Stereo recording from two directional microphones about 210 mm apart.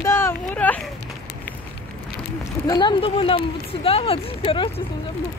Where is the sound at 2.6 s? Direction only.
20° left (ahead or behind).